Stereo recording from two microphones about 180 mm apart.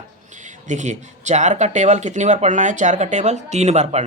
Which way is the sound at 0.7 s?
40° right (ahead or behind).